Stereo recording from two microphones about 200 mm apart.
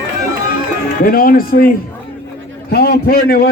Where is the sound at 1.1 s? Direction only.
45° left (ahead or behind).